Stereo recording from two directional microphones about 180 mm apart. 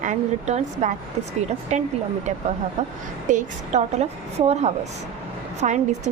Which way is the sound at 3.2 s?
40° right (ahead or behind).